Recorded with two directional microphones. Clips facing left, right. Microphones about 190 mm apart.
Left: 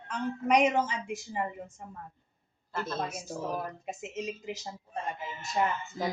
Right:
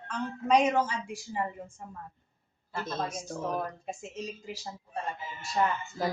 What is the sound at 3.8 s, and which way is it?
Speech, 20° left (ahead or behind).